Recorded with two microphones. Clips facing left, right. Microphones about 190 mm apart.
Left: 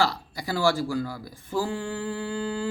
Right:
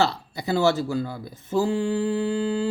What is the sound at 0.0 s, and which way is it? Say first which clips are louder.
Mantra: right 2 dB; 25° right (ahead or behind).